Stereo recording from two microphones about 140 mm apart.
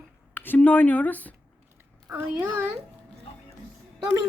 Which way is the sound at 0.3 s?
15° left (ahead or behind).